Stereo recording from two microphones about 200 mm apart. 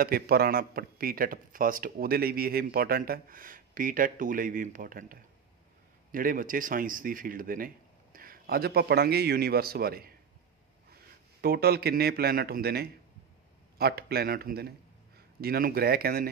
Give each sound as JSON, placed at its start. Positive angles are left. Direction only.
{"t": 0.0, "sound": "a man's voice", "side_deg": -50}
{"t": 11.4, "sound": "a man's voice", "side_deg": -50}